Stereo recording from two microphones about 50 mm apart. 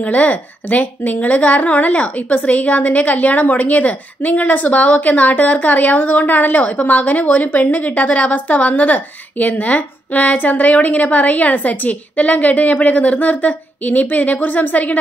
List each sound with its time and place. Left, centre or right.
0.0 s a woman's voice: left